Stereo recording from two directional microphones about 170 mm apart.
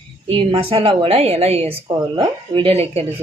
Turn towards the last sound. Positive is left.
turn(degrees=-35)  # may be behind; listen again after turning